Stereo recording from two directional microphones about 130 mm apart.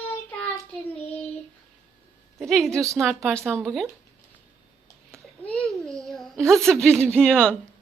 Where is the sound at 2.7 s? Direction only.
25° right (ahead or behind).